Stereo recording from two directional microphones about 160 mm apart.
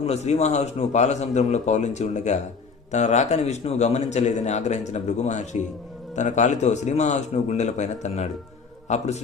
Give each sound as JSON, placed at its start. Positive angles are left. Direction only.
{"t": 0.0, "sound": "a man's voice", "side_deg": 45}